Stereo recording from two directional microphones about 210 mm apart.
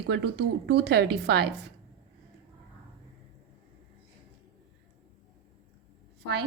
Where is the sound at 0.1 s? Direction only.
55° right (ahead or behind).